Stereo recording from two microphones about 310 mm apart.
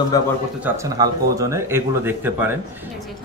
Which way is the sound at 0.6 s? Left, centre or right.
Centre.